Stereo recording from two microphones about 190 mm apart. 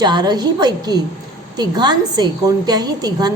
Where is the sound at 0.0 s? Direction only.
20° right (ahead or behind).